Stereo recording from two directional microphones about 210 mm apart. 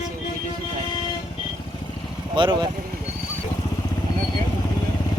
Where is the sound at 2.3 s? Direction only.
20° right (ahead or behind).